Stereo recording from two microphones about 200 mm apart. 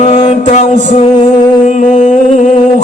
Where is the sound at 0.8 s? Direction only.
35° left (ahead or behind).